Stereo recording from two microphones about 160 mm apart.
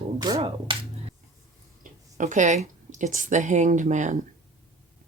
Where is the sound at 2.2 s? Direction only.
50° right (ahead or behind).